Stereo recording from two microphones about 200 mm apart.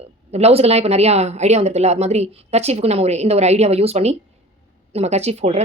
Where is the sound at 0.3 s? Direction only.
30° right (ahead or behind).